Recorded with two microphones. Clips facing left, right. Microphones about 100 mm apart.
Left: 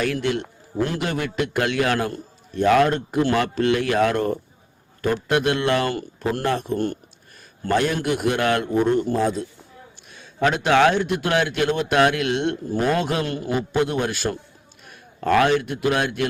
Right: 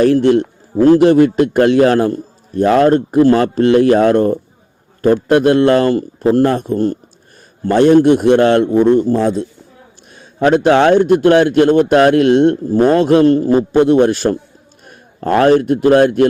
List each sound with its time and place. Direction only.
0.0 s a man's voice: 35° right (ahead or behind)